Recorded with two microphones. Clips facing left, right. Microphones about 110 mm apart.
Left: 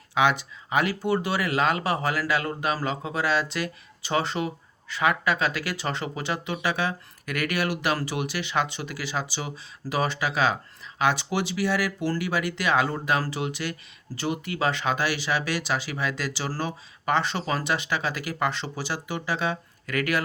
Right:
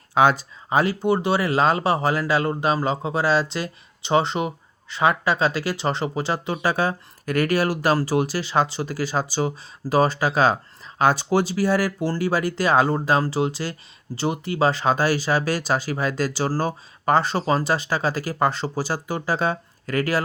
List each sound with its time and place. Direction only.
0.1 s speech: 40° right (ahead or behind)